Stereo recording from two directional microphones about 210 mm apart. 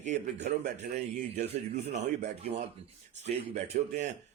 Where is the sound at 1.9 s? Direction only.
30° right (ahead or behind).